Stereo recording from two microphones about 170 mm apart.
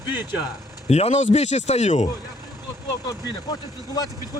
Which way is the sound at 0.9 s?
40° left (ahead or behind).